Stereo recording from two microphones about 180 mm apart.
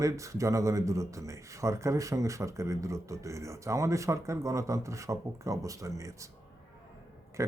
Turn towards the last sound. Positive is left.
turn(degrees=-15)  # may be behind; listen again after turning